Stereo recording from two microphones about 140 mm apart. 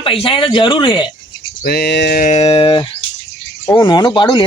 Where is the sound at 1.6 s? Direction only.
90° left.